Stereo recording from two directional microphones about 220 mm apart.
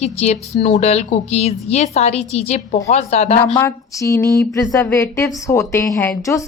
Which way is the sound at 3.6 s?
15° left (ahead or behind).